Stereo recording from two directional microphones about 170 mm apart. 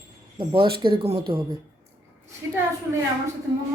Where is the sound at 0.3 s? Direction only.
30° right (ahead or behind).